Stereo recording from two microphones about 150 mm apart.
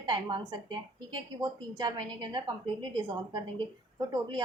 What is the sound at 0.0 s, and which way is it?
A woman's voice, 30° right (ahead or behind).